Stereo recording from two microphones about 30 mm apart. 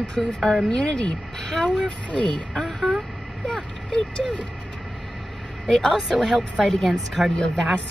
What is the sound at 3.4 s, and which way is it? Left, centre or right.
Speech, left.